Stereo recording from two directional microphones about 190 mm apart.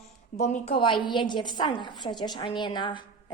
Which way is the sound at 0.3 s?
40° left (ahead or behind).